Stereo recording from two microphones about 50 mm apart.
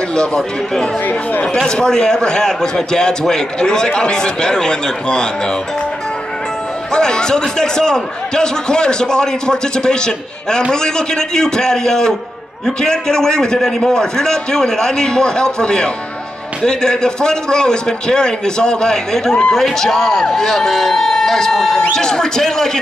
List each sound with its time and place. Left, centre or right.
0.1 s a man's voice: centre
6.9 s a man's voice: centre